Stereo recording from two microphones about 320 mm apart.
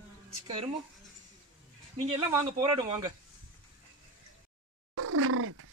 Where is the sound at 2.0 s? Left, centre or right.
Centre.